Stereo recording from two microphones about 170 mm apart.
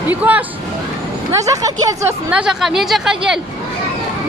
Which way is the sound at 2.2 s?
5° right (ahead or behind).